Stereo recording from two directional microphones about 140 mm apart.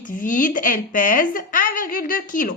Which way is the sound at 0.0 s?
75° left (ahead or behind).